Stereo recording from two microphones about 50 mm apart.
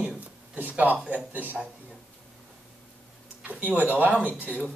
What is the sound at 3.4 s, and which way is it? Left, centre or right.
Speech, right.